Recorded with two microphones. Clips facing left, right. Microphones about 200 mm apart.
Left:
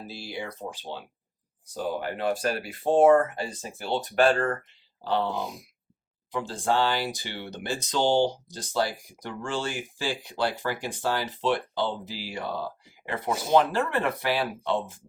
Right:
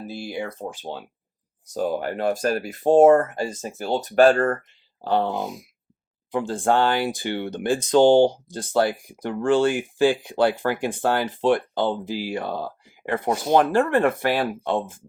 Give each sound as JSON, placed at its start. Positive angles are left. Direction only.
{"t": 0.0, "sound": "speech", "side_deg": -50}